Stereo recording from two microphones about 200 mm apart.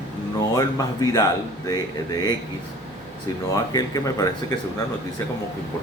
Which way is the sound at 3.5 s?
20° left (ahead or behind).